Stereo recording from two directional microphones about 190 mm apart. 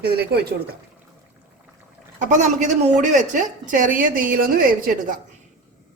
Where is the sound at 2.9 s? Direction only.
40° right (ahead or behind).